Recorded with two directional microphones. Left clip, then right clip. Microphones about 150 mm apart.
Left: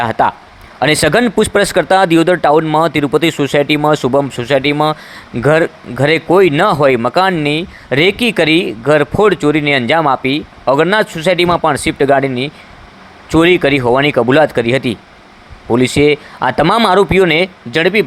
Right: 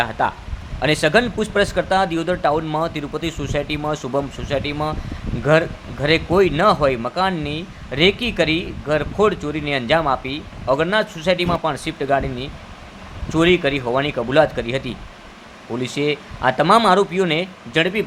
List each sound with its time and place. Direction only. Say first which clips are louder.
0.0 s speech: left 7 dB; 50° left (ahead or behind)